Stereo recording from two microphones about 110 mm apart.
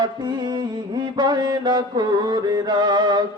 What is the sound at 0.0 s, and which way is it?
Music, 40° right (ahead or behind).